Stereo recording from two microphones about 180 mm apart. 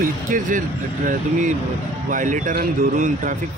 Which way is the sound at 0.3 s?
45° right (ahead or behind).